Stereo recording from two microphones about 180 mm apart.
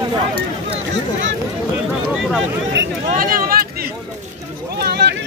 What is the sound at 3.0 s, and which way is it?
Speech, 50° right (ahead or behind).